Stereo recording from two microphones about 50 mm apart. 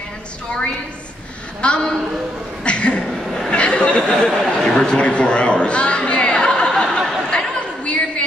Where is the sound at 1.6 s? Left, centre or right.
Centre.